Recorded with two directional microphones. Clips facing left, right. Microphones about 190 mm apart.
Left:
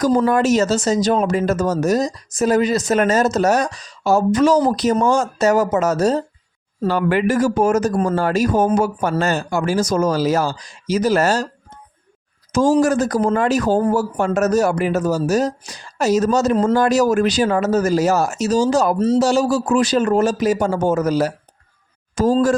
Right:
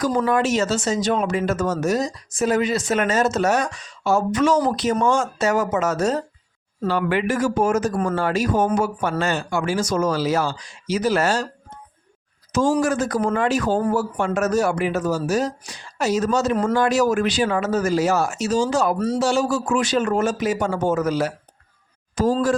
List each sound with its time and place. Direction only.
0.0 s speech: 40° left (ahead or behind)
12.5 s speech: 40° left (ahead or behind)
18.9 s speech: 25° left (ahead or behind)
19.2 s speech: 40° left (ahead or behind)